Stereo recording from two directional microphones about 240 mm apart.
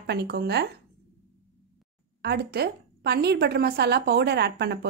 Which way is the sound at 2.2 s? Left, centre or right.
Right.